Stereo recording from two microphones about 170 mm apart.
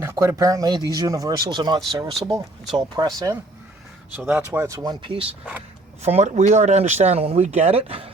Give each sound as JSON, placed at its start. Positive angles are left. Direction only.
{"t": 0.0, "sound": "speech", "side_deg": -15}
{"t": 4.2, "sound": "speech", "side_deg": -5}